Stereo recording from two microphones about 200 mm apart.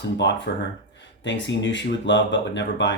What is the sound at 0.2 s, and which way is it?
Speech, 65° left (ahead or behind).